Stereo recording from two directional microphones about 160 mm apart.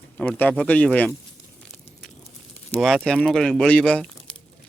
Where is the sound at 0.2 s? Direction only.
10° left (ahead or behind).